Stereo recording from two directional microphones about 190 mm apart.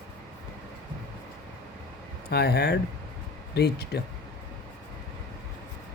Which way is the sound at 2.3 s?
60° left (ahead or behind).